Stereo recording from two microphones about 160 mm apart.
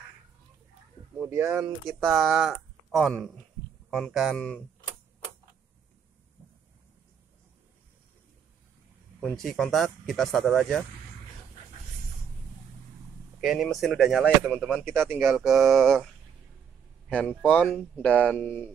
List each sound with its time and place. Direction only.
1.1 s speech: 15° right (ahead or behind)
1.9 s speech: centre (ahead or behind)
9.2 s speech: 5° left (ahead or behind)
13.4 s speech: centre (ahead or behind)
14.9 s speech: 15° right (ahead or behind)
15.1 s speech: centre (ahead or behind)
17.1 s speech: 10° left (ahead or behind)